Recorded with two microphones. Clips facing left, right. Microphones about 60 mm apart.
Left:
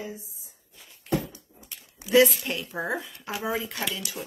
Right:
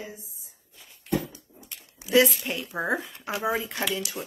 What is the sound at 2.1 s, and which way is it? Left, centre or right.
Speech, centre.